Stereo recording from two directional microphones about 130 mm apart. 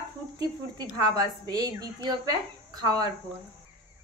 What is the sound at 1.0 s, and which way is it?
A woman's voice, 30° right (ahead or behind).